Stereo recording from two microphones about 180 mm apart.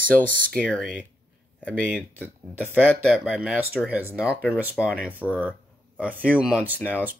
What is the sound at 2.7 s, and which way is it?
Speech, 10° right (ahead or behind).